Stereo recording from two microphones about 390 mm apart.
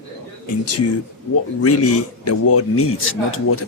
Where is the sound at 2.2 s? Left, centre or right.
Left.